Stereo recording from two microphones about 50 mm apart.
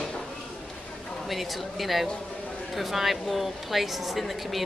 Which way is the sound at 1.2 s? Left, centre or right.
Centre.